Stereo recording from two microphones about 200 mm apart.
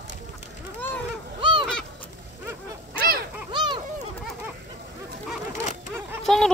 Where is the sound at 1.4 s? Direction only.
25° right (ahead or behind).